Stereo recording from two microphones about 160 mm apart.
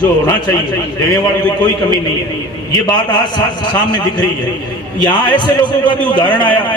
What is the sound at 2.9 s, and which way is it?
A man's voice, 25° left (ahead or behind).